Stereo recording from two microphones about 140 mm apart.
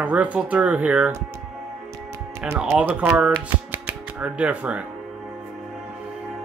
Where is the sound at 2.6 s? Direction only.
10° right (ahead or behind).